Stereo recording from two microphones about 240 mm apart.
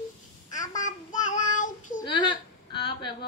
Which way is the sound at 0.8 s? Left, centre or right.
Left.